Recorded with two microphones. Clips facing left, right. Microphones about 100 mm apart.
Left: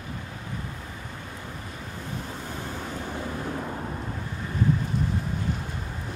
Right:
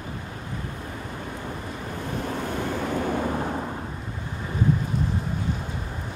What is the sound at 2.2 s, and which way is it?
Waves, 65° right (ahead or behind).